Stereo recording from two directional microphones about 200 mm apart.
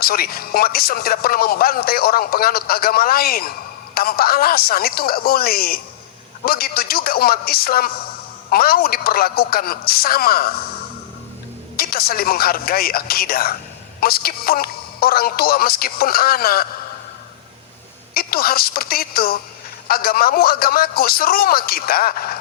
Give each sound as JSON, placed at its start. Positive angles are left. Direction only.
{"t": 0.0, "sound": "speech", "side_deg": 50}
{"t": 11.8, "sound": "speech", "side_deg": 50}
{"t": 18.1, "sound": "speech", "side_deg": 50}